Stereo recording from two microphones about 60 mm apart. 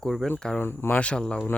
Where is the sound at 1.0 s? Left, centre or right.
Centre.